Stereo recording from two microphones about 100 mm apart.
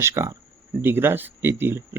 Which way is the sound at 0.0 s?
30° right (ahead or behind).